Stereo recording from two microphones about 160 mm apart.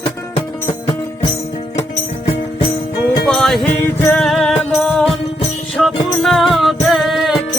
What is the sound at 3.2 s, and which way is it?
Music, 5° left (ahead or behind).